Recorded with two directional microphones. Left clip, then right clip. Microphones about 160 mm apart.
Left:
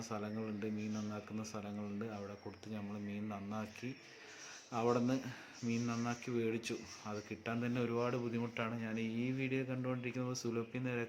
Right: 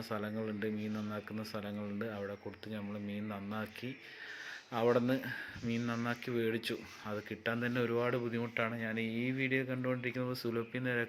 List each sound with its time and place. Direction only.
0.1 s speech: 10° right (ahead or behind)
2.7 s speech: 10° right (ahead or behind)
4.7 s speech: 10° right (ahead or behind)